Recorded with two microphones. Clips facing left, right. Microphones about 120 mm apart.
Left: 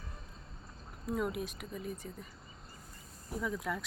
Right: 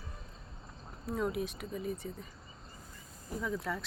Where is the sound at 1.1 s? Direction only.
Centre (ahead or behind).